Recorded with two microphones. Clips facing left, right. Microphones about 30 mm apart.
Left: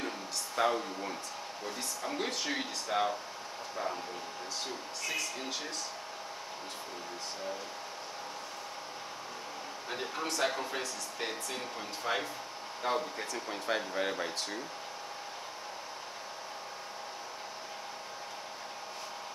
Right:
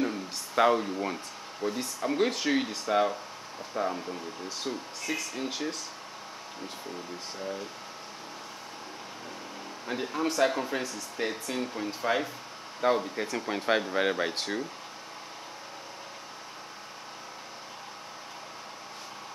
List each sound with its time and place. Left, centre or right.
0.6 s speech: right
1.7 s speech: centre
9.8 s speech: centre
12.8 s speech: centre
13.5 s speech: right